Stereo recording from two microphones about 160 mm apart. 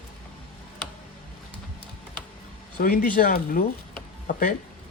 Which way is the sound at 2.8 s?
65° left (ahead or behind).